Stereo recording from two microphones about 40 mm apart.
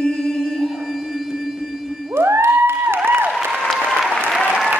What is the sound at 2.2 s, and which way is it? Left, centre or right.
Music, right.